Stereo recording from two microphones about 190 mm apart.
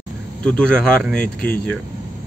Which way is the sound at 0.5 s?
5° left (ahead or behind).